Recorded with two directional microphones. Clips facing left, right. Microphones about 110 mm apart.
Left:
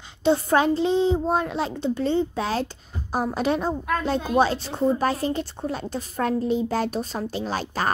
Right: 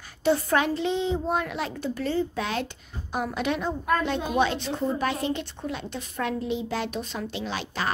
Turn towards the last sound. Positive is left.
turn(degrees=40)  # may be behind; listen again after turning